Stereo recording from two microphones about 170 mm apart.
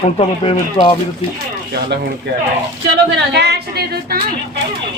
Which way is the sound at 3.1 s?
80° right.